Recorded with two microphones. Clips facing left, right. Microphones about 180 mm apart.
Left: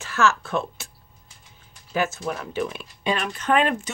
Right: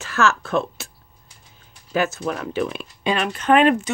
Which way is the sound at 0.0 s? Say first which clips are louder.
Right 1 dB; 70° right (ahead or behind).